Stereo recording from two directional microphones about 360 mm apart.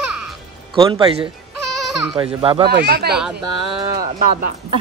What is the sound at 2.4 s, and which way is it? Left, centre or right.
Speech, centre.